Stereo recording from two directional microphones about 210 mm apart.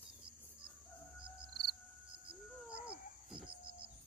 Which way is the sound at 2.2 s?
50° right (ahead or behind).